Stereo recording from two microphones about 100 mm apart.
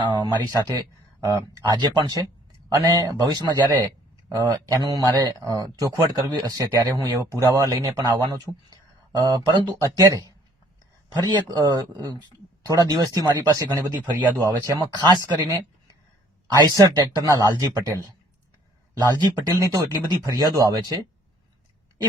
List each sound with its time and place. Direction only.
0.0 s speech: 45° right (ahead or behind)
6.8 s speech: 35° right (ahead or behind)
9.8 s speech: 35° right (ahead or behind)
16.7 s speech: 45° right (ahead or behind)
18.9 s speech: 45° right (ahead or behind)
19.5 s speech: 35° right (ahead or behind)